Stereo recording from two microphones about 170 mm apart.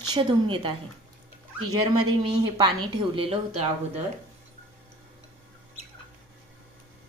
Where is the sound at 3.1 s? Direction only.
35° right (ahead or behind).